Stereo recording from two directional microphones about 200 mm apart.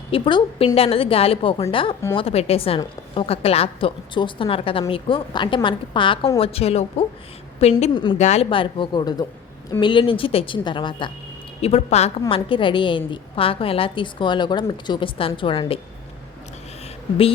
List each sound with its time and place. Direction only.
0.1 s a woman's voice: 25° left (ahead or behind)